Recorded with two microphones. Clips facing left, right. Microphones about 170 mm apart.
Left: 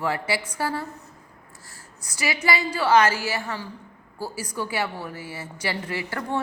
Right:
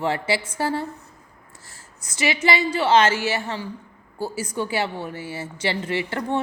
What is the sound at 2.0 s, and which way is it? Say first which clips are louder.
A woman's voice: right 3 dB; 25° right (ahead or behind).